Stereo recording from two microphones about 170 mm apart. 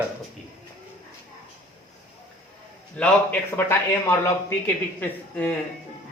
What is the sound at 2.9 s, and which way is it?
A man's voice, 5° left (ahead or behind).